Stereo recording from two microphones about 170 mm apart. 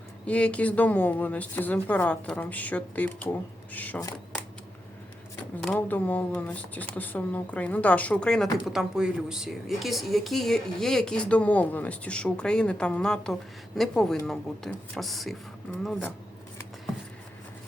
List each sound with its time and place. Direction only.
0.3 s speech: 5° left (ahead or behind)
5.6 s speech: 5° left (ahead or behind)